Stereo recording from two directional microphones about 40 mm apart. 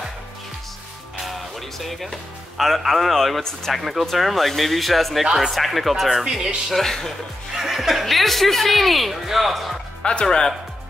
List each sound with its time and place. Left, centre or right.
1.1 s music: centre
1.9 s speech: centre
5.2 s speech: centre
6.2 s speech: centre
6.7 s speech: centre
7.5 s speech: centre
10.2 s speech: centre